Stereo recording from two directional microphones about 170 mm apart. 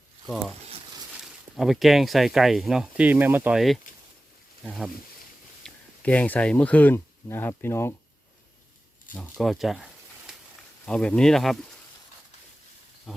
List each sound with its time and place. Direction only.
1.5 s speech: centre (ahead or behind); by 7.9 s 15° left (ahead or behind)
9.1 s speech: 5° left (ahead or behind)
13.1 s speech: centre (ahead or behind)